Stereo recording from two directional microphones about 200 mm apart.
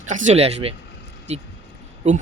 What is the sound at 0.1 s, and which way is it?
Speech, 35° right (ahead or behind).